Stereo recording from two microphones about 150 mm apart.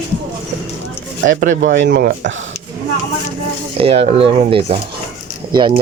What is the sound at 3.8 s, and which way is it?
Speech, 40° right (ahead or behind).